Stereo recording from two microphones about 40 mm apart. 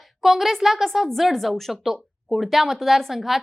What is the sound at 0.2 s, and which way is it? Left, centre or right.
A woman's voice, centre.